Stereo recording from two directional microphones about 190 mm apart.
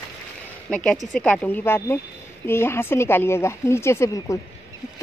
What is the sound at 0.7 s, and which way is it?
Speech, 5° left (ahead or behind).